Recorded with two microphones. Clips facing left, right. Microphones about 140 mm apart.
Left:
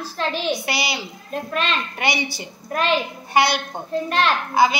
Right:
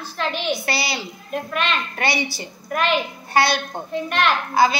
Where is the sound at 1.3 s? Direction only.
35° left (ahead or behind).